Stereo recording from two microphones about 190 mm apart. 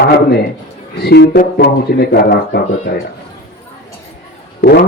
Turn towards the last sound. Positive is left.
turn(degrees=60)  # may be behind; listen again after turning